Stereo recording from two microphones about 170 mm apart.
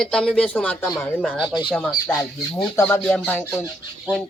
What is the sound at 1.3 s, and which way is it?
Speech, 30° left (ahead or behind).